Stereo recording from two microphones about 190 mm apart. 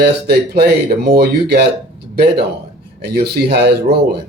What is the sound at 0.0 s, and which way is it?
Speech, 55° right (ahead or behind).